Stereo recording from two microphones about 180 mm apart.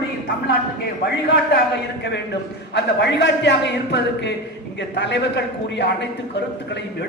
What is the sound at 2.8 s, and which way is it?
A man's voice, 75° left (ahead or behind).